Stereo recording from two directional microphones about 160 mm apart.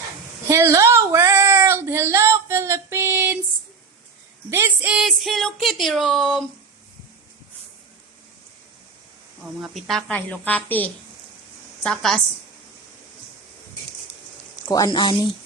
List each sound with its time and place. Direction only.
0.4 s child singing: 20° right (ahead or behind)
4.5 s speech: 10° right (ahead or behind)
9.6 s a woman's voice: centre (ahead or behind)
14.6 s speech: 20° left (ahead or behind)